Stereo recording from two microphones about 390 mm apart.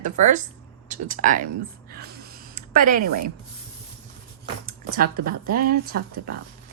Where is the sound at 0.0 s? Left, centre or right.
Centre.